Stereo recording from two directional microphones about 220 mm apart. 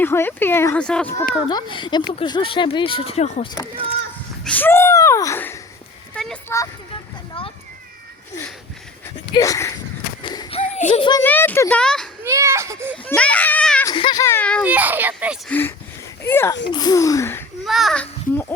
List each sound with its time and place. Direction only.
0.0 s speech: 10° left (ahead or behind)
1.5 s speech: 20° left (ahead or behind)
4.4 s speech: 10° left (ahead or behind)
7.3 s children playing: 25° left (ahead or behind)
9.3 s speech: 15° left (ahead or behind)
10.2 s a sound: 20° left (ahead or behind)
10.6 s a sound: 35° left (ahead or behind)
11.2 s speech: 10° left (ahead or behind)
12.2 s speech: 15° right (ahead or behind)
12.9 s a child's voice: 5° left (ahead or behind)
13.8 s speech: 20° left (ahead or behind)
14.6 s speech: 5° right (ahead or behind)
15.4 s speech: 10° left (ahead or behind)
17.7 s a child's voice: centre (ahead or behind)